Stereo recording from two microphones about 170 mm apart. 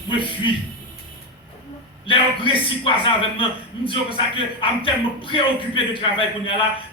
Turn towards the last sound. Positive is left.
turn(degrees=30)  # may be behind; listen again after turning